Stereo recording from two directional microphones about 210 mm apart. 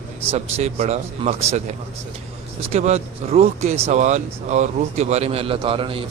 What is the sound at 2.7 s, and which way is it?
Speech, 30° right (ahead or behind).